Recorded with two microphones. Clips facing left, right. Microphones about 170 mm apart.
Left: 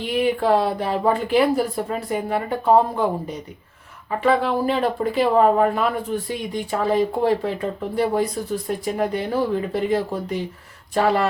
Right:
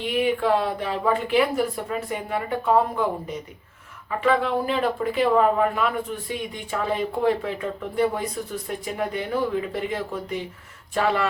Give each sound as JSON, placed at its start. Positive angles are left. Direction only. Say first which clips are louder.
{"t": 0.1, "sound": "speech", "louder": "left 3 dB", "side_deg": 35}
{"t": 4.2, "sound": "speech", "louder": "left 2 dB", "side_deg": 35}